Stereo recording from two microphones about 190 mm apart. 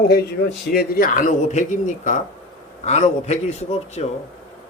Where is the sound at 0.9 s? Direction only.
50° left (ahead or behind).